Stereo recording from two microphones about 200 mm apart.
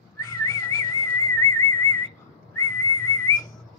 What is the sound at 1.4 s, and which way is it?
Whistling, 15° left (ahead or behind).